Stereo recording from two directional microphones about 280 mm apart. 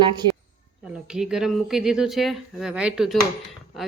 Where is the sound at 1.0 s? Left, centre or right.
Centre.